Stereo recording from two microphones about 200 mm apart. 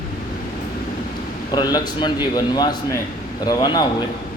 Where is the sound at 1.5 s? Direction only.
20° left (ahead or behind).